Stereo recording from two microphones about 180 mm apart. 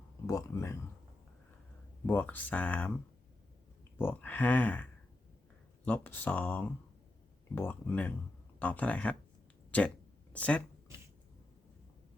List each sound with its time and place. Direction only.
0.3 s speech: 15° left (ahead or behind)
2.0 s speech: 10° left (ahead or behind)
3.9 s speech: 10° left (ahead or behind)